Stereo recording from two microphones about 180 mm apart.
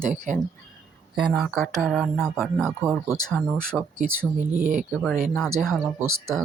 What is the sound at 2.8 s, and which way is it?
Speech, 15° right (ahead or behind).